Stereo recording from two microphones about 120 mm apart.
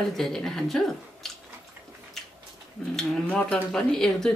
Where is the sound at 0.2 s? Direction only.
5° left (ahead or behind).